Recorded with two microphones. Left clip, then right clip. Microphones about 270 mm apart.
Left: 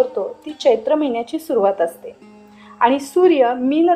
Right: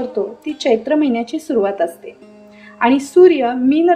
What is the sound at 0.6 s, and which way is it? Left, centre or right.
A woman's voice, left.